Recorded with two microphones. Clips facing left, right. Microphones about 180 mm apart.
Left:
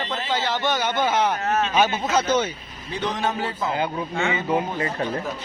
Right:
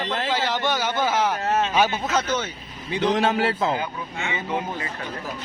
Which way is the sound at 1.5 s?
25° right (ahead or behind).